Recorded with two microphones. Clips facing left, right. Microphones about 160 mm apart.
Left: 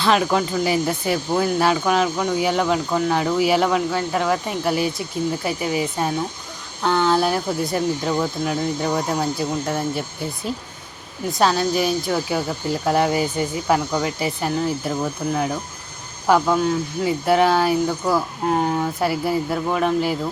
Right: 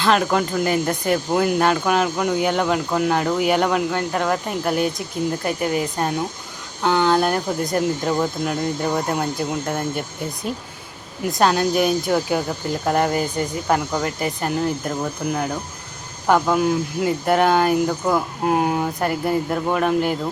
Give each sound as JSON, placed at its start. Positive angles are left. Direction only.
{"t": 0.0, "sound": "speech", "side_deg": 0}
{"t": 11.3, "sound": "speech", "side_deg": 0}
{"t": 18.9, "sound": "speech", "side_deg": 5}